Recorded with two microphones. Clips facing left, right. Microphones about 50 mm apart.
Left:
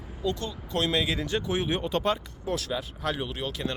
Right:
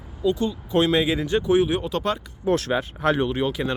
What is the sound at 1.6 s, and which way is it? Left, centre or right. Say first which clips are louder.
Speech: right 6 dB; centre.